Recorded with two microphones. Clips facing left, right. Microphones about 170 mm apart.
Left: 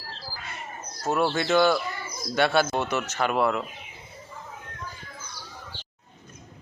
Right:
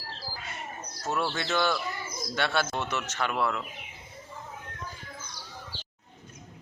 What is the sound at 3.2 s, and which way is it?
Speech, 40° left (ahead or behind).